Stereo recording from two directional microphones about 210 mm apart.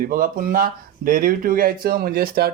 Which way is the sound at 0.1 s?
40° right (ahead or behind).